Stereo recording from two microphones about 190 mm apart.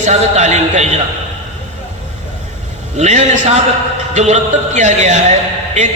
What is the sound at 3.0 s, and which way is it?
A man's voice, 40° right (ahead or behind).